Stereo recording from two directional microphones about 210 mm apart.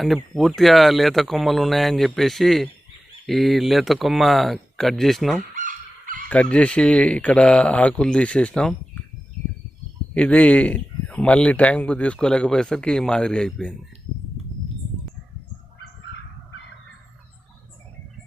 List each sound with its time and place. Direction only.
0.0 s speech: centre (ahead or behind)
5.5 s fowl: 40° right (ahead or behind)
6.2 s speech: 5° left (ahead or behind)
10.2 s speech: 5° left (ahead or behind)